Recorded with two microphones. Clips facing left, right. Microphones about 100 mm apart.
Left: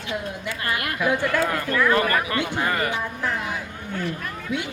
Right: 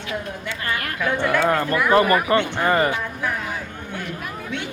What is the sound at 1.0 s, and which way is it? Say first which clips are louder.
Speech: left 1 dB; 10° left (ahead or behind).